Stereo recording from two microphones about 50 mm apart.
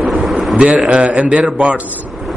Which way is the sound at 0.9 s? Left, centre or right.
Centre.